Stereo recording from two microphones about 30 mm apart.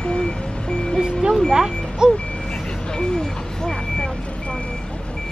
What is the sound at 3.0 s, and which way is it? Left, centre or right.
Speech, left.